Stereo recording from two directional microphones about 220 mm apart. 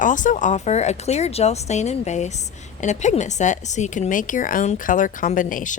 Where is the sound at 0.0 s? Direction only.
35° left (ahead or behind).